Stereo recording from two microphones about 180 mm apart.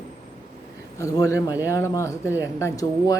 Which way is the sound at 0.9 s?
20° left (ahead or behind).